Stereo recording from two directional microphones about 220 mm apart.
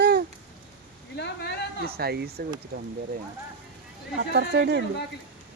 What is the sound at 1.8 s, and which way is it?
Speech, 45° right (ahead or behind).